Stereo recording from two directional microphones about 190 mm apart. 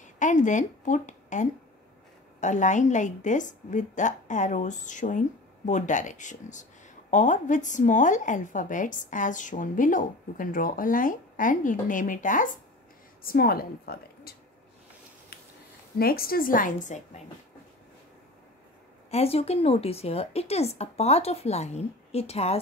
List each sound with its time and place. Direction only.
0.0 s a woman's voice: 40° left (ahead or behind)
16.0 s a woman's voice: 50° left (ahead or behind)
19.0 s a woman's voice: 35° left (ahead or behind)